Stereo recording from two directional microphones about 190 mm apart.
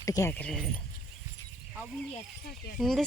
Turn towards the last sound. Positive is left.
turn(degrees=0)  # may be behind; listen again after turning